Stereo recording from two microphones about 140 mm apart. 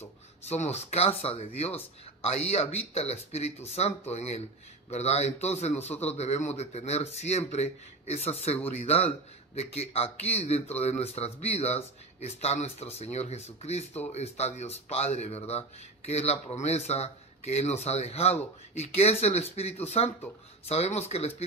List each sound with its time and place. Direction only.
0.0 s a man's voice: 50° left (ahead or behind)